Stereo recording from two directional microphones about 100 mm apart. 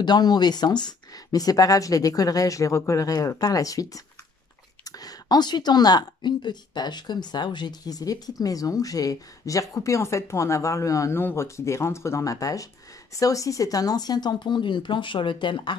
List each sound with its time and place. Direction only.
0.0 s speech: 45° left (ahead or behind)